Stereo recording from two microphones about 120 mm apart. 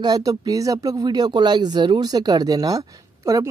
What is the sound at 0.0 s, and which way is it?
Speech, 30° right (ahead or behind).